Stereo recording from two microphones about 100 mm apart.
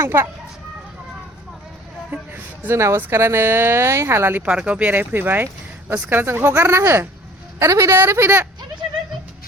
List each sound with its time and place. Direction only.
0.0 s speech: 25° right (ahead or behind)
2.3 s speech: 25° right (ahead or behind)